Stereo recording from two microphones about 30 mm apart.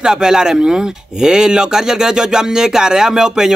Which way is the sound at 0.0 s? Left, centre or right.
Right.